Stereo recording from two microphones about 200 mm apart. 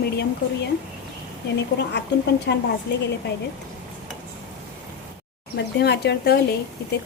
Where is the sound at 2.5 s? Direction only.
55° left (ahead or behind).